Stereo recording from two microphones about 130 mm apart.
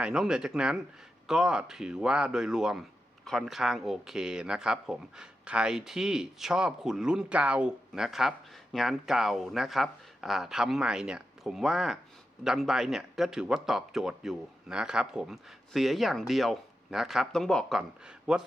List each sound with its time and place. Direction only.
0.0 s speech: 5° right (ahead or behind)